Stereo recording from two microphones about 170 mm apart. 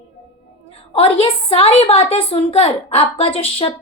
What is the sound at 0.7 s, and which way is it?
A woman's voice, 35° left (ahead or behind).